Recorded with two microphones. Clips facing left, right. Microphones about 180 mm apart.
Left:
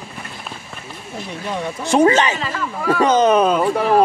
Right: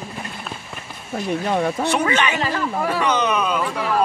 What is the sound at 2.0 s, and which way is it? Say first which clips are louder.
Speech: left 6 dB; 40° left (ahead or behind).